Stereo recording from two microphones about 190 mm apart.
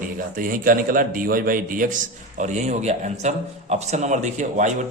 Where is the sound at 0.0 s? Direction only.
45° right (ahead or behind).